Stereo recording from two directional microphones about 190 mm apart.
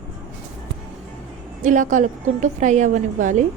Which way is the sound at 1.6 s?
40° right (ahead or behind).